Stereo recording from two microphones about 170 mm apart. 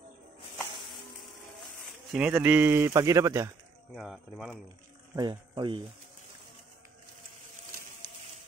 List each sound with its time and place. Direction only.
2.1 s speech: 10° right (ahead or behind)
3.9 s speech: centre (ahead or behind)
5.1 s speech: 25° right (ahead or behind)